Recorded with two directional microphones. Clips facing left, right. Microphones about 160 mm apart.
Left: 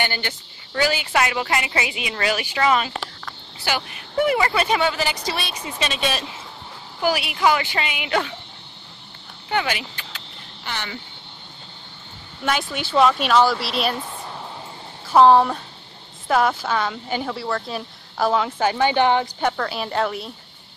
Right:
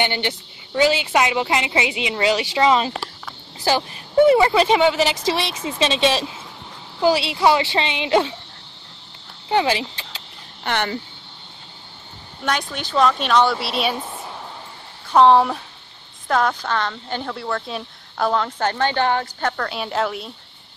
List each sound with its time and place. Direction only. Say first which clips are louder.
0.0 s a woman's voice: right 4 dB; 20° right (ahead or behind)
3.5 s a woman's voice: right 6 dB; 35° right (ahead or behind)
5.1 s a woman's voice: right 6 dB; 90° right
5.6 s a woman's voice: right 6 dB; 25° right (ahead or behind)
9.5 s speech: right 5 dB; 30° right (ahead or behind)
10.6 s speech: right 8 dB; 55° right (ahead or behind)
12.4 s speech: even; 5° left (ahead or behind)
15.1 s speech: even; centre (ahead or behind); by 19.5 s 15° left (ahead or behind)
19.5 s speech: even; centre (ahead or behind)